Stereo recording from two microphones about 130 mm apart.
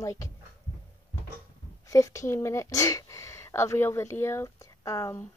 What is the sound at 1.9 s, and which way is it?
Speech, 25° left (ahead or behind).